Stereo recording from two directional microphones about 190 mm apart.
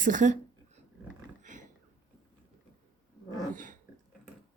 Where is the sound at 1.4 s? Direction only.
40° right (ahead or behind).